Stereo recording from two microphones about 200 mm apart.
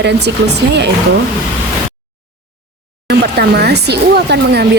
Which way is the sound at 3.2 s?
55° right (ahead or behind).